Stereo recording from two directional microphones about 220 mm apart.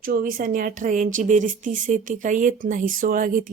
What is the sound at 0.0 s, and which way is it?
Speech, 40° right (ahead or behind).